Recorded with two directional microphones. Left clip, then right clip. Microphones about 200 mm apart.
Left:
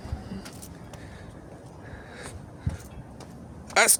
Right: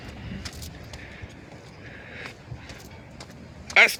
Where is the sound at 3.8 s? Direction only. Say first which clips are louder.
Right 5 dB; 15° left (ahead or behind).